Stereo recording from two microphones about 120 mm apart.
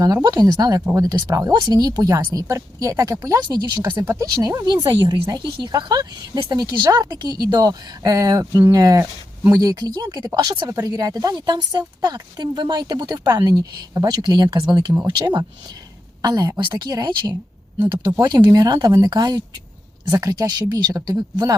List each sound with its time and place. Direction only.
0.0 s speech: 30° right (ahead or behind)
3.9 s speech: 20° right (ahead or behind)